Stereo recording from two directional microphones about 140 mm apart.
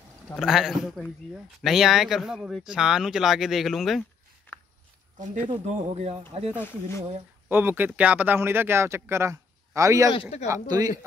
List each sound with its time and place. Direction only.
0.4 s speech: 5° right (ahead or behind)
5.2 s speech: 60° right (ahead or behind)
7.4 s a man's voice: 15° right (ahead or behind)